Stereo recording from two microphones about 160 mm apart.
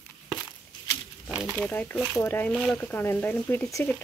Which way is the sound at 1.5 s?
5° left (ahead or behind).